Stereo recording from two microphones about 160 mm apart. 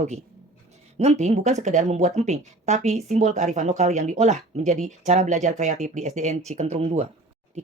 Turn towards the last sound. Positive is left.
turn(degrees=-40)  # may be behind; listen again after turning